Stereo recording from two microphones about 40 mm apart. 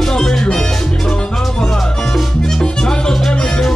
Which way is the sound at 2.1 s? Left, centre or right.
Centre.